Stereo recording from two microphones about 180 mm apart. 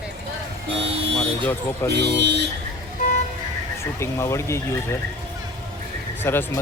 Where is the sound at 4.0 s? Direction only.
15° left (ahead or behind).